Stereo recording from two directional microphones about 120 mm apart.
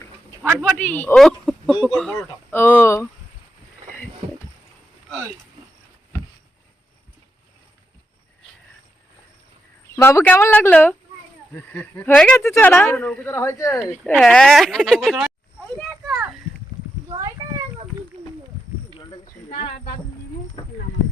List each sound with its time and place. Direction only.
0.6 s speech: 10° left (ahead or behind)
1.2 s a sound: 5° left (ahead or behind)
2.0 s speech: 5° left (ahead or behind)
2.5 s speech: 15° left (ahead or behind)
9.9 s speech: 20° left (ahead or behind)
13.8 s speech: 10° left (ahead or behind)
20.6 s speech: 35° left (ahead or behind)